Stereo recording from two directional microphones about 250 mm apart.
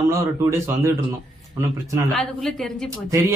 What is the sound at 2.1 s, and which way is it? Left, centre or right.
Speech, centre.